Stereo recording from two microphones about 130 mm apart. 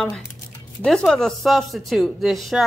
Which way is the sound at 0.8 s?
5° left (ahead or behind).